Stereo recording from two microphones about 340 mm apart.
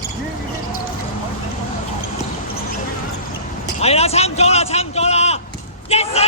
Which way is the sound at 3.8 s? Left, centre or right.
Centre.